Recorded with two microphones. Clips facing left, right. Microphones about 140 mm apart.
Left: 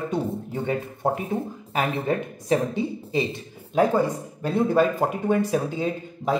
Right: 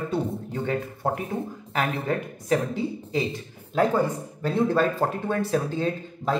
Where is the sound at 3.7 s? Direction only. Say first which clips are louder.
Left 2 dB; 15° left (ahead or behind).